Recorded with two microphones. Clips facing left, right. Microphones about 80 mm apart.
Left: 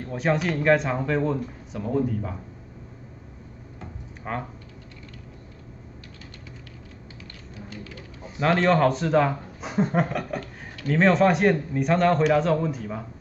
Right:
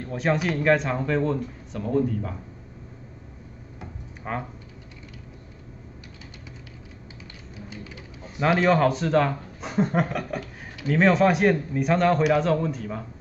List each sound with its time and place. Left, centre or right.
0.1 s speech: centre
4.2 s speech: centre
7.7 s a sound: centre
8.4 s speech: centre